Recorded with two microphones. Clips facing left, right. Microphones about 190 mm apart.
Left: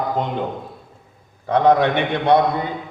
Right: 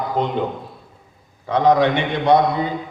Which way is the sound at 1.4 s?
55° left (ahead or behind).